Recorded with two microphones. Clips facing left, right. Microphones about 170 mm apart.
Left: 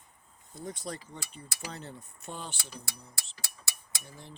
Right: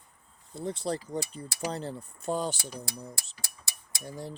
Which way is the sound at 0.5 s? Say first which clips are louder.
Right 7 dB; 30° right (ahead or behind).